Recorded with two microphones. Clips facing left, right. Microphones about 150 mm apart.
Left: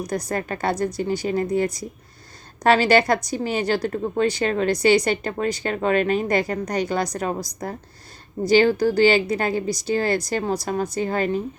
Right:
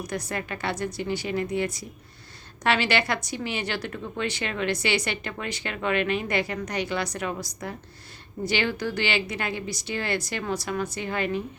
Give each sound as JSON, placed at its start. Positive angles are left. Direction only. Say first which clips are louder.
{"t": 0.3, "sound": "a woman's voice", "louder": "left 6 dB", "side_deg": 40}